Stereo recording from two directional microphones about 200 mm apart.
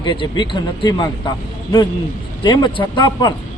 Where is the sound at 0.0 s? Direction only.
25° left (ahead or behind).